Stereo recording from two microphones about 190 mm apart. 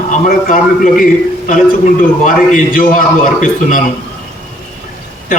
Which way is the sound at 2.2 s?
45° left (ahead or behind).